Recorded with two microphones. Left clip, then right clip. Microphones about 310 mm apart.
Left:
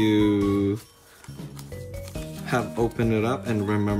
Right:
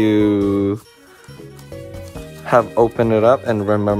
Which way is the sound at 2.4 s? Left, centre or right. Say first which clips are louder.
Right 13 dB; centre.